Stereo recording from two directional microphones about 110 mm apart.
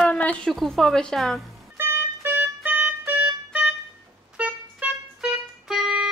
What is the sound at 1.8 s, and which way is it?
Music, 20° right (ahead or behind).